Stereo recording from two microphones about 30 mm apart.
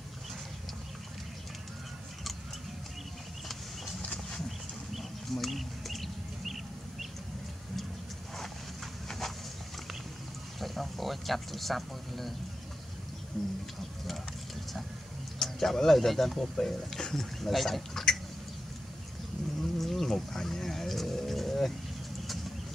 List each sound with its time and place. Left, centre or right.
5.3 s bird: centre
10.6 s speech: centre
14.0 s speech: centre
17.4 s duck: centre
19.8 s a sound: centre